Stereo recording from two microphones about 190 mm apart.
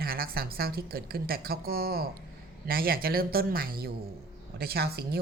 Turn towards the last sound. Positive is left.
turn(degrees=-55)  # may be behind; listen again after turning